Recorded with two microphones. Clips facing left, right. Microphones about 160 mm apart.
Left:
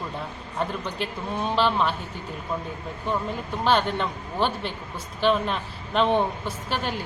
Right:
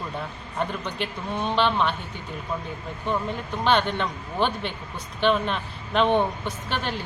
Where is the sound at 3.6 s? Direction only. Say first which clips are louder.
Even; 5° left (ahead or behind).